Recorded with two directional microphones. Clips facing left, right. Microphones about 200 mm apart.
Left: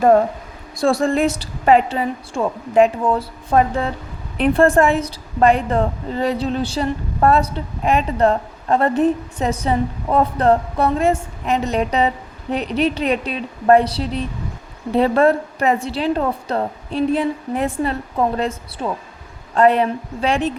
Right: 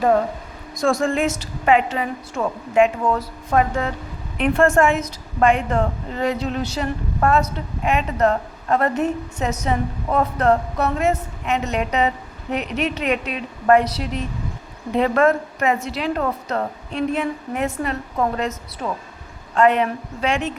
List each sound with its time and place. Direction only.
0.8 s a woman's voice: 35° left (ahead or behind)